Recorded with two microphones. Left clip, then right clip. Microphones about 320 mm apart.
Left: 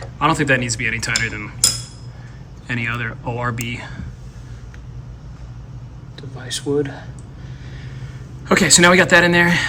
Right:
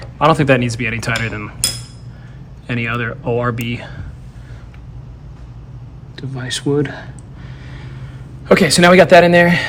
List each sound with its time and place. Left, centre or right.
0.0 s speech: centre
2.6 s speech: centre
6.1 s speech: right
7.7 s vehicle: centre
8.4 s speech: centre